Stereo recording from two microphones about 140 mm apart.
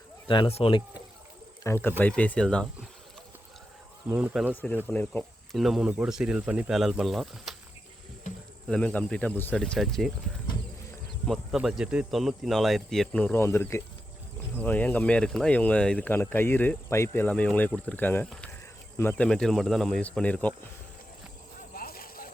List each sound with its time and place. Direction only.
0.3 s speech: 40° left (ahead or behind)
1.6 s speech: 15° left (ahead or behind)
4.1 s speech: 10° right (ahead or behind)
4.9 s speech: 10° left (ahead or behind)
5.5 s speech: centre (ahead or behind)
8.6 s speech: 5° left (ahead or behind)
11.5 s speech: 5° right (ahead or behind)
21.8 s clip-clop: 90° left